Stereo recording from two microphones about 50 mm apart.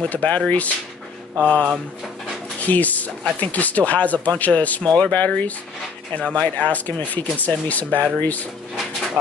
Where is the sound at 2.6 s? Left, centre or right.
Left.